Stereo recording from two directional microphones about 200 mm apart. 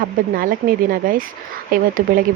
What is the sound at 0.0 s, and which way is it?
Speech, 45° right (ahead or behind).